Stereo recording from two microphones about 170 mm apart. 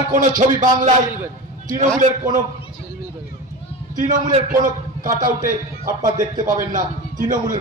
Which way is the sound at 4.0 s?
50° right (ahead or behind).